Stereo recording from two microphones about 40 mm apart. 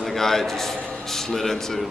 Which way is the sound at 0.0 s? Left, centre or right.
Centre.